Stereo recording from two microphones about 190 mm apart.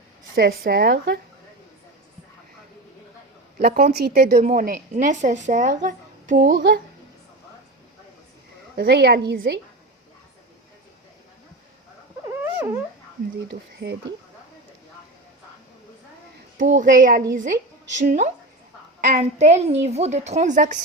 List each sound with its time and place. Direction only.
0.3 s a woman's voice: 55° right (ahead or behind)
3.7 s a woman's voice: 35° right (ahead or behind)
3.9 s a woman's voice: 55° right (ahead or behind)
6.6 s a woman's voice: 55° right (ahead or behind)
8.7 s a woman's voice: 55° right (ahead or behind)
12.3 s dog: 10° right (ahead or behind)
13.5 s a woman's voice: 60° right (ahead or behind)
16.6 s a child's voice: 40° right (ahead or behind)